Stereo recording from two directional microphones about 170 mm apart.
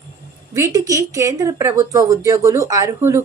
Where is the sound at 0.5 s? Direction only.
20° right (ahead or behind).